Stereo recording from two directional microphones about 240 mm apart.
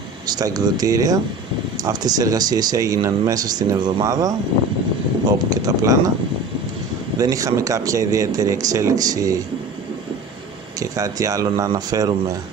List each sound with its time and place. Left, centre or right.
0.3 s speech: centre
5.5 s speech: centre
7.2 s speech: centre
10.8 s speech: centre